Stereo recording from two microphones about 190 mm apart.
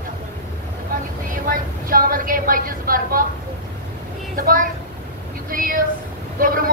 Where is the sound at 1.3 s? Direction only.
50° right (ahead or behind).